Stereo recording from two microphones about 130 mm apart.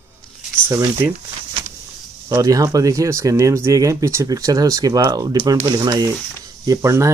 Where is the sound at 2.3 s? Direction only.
25° right (ahead or behind).